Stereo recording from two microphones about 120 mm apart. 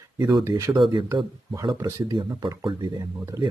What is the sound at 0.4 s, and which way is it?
Speech, 25° right (ahead or behind).